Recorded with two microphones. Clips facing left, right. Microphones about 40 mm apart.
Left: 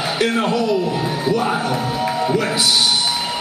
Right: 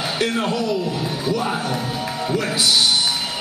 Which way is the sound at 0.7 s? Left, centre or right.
Left.